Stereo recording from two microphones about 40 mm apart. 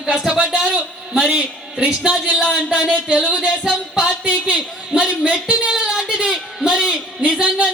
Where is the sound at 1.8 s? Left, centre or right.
Right.